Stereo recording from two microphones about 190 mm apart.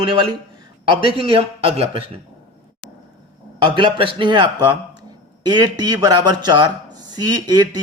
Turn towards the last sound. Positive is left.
turn(degrees=-20)  # may be behind; listen again after turning